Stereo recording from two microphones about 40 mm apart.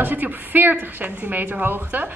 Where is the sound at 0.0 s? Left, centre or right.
Right.